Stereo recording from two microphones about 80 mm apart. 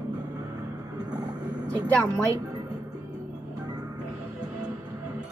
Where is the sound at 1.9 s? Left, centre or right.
Left.